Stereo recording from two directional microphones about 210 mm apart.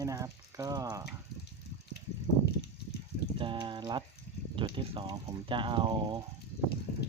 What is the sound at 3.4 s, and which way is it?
Speech, 25° right (ahead or behind).